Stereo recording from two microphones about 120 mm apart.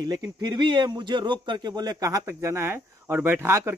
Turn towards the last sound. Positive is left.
turn(degrees=-20)  # may be behind; listen again after turning